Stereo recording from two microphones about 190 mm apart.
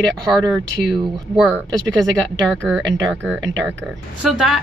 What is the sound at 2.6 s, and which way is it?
A woman's voice, 5° right (ahead or behind).